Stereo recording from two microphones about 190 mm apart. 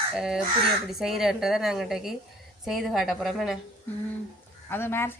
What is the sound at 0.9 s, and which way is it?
A woman's voice, centre (ahead or behind).